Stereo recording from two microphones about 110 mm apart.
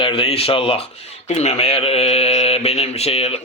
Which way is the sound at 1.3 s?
75° left (ahead or behind).